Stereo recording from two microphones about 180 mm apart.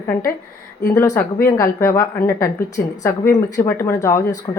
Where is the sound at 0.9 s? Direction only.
15° left (ahead or behind).